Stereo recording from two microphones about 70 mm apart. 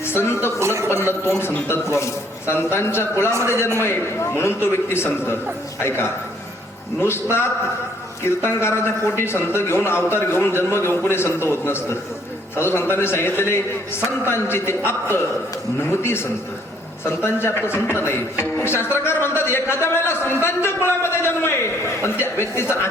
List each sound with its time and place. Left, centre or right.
0.0 s a woman's voice: left
0.6 s speech: right
1.0 s a man's voice: left